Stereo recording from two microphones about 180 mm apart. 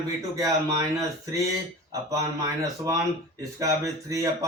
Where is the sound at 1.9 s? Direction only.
20° right (ahead or behind).